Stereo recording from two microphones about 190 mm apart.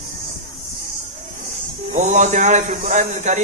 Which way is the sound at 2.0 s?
40° right (ahead or behind).